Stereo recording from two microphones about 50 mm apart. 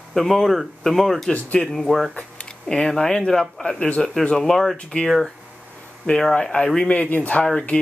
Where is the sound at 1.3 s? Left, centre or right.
Left.